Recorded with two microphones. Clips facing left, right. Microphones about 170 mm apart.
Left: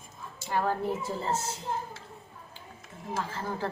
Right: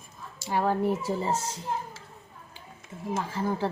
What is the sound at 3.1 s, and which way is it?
Speech, 10° right (ahead or behind).